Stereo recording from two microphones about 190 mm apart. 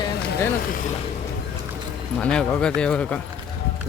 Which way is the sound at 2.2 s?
5° left (ahead or behind).